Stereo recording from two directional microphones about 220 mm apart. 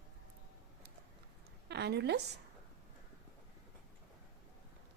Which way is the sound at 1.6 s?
50° right (ahead or behind).